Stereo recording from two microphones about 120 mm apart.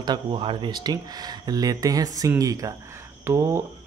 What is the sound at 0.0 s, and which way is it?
Speech, 40° right (ahead or behind).